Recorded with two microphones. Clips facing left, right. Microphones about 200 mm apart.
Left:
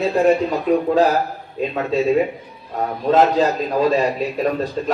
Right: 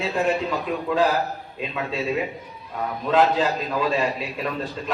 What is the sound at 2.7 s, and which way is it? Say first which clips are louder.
A man's voice: left 4 dB; 45° left (ahead or behind).